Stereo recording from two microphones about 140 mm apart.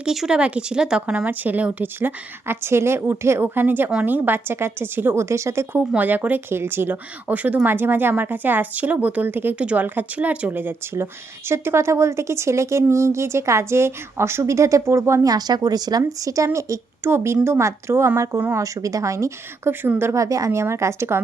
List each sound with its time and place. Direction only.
0.0 s speech: 5° right (ahead or behind); by 21.2 s 20° right (ahead or behind)